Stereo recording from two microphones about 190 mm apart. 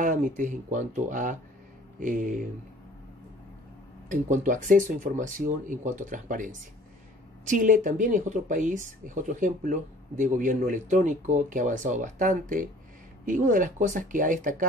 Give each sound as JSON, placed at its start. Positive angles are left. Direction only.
{"t": 0.0, "sound": "speech", "side_deg": -40}
{"t": 4.1, "sound": "speech", "side_deg": -40}